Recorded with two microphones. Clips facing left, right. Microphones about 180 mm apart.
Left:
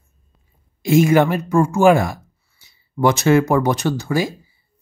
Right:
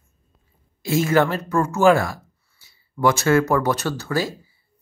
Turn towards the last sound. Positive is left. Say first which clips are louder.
# left 4 dB
turn(degrees=15)  # may be behind; listen again after turning